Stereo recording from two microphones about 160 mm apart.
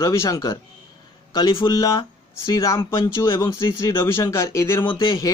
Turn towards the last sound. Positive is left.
turn(degrees=30)  # may be behind; listen again after turning